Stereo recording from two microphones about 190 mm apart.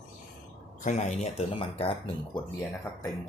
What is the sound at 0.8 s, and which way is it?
Speech, 40° left (ahead or behind).